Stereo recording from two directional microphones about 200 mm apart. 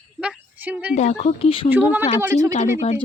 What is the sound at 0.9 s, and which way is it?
Speech, 30° left (ahead or behind).